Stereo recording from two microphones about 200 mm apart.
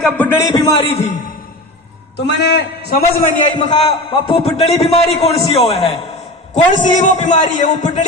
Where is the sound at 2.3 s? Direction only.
55° left (ahead or behind).